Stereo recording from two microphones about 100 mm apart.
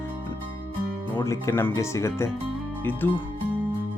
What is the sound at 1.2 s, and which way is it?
Speech, 30° left (ahead or behind).